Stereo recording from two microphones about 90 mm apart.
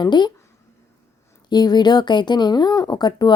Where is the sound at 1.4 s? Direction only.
50° left (ahead or behind).